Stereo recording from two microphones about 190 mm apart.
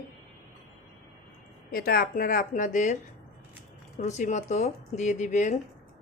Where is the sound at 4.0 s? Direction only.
40° left (ahead or behind).